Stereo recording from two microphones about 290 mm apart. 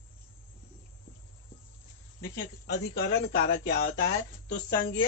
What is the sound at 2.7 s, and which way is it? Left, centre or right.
Speech, left.